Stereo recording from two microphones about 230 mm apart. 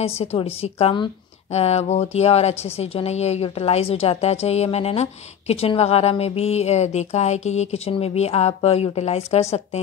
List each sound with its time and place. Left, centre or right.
0.0 s a woman's voice: left